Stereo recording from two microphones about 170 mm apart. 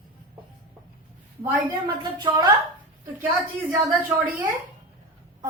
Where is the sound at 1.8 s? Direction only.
25° right (ahead or behind).